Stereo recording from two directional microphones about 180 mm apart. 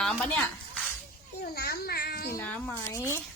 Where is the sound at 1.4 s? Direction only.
60° left (ahead or behind).